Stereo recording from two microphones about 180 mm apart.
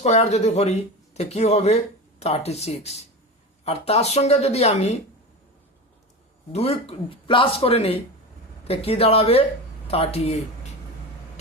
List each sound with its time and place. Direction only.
0.0 s speech: 35° left (ahead or behind)
6.5 s speech: 35° left (ahead or behind)